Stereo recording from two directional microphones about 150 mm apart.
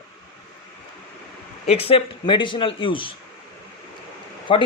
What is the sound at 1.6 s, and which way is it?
Speech, 40° left (ahead or behind).